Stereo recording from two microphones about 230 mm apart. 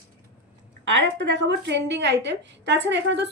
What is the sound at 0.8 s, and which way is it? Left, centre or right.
A woman's voice, right.